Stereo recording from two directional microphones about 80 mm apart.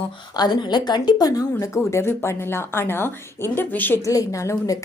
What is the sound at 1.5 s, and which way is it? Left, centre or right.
Speech, left.